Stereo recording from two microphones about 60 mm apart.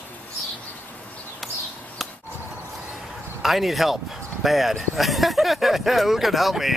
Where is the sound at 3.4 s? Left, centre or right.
Centre.